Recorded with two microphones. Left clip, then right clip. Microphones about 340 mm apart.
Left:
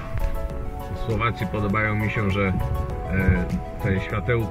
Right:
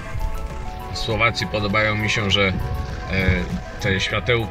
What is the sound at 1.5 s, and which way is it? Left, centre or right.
Speech, centre.